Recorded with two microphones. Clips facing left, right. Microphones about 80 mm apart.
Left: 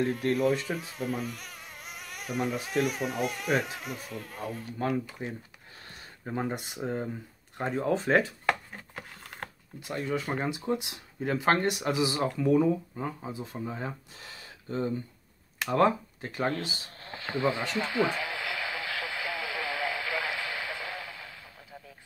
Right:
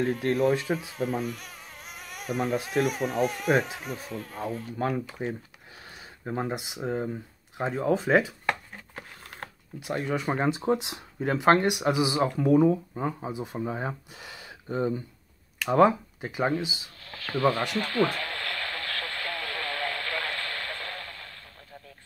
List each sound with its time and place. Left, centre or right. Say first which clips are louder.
0.0 s speech: right 1 dB; right
0.4 s speech: right 3 dB; centre
0.7 s speech: right 5 dB; centre
0.9 s speech: right 2 dB; right
1.2 s a sound: right 3 dB; centre
2.6 s speech: right 2 dB; centre
3.4 s speech: right 3 dB; right
3.8 s speech: right 3 dB; centre
5.2 s speech: right 5 dB; right
5.9 s speech: right 3 dB; centre
8.9 s a sound: right 1 dB; centre
10.1 s speech: right 5 dB; right
16.6 s speech: right 3 dB; left
17.0 s a sound: right 4 dB; left; by 21.9 s centre